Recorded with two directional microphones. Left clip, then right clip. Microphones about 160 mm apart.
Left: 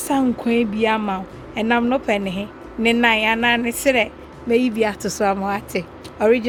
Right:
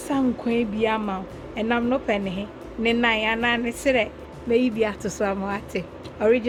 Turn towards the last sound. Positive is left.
turn(degrees=60)  # may be behind; listen again after turning